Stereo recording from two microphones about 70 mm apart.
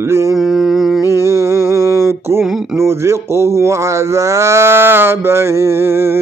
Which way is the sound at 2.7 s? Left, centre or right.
Right.